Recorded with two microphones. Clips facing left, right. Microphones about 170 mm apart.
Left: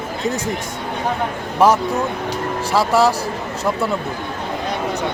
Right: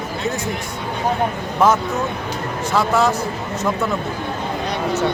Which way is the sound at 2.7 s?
30° left (ahead or behind).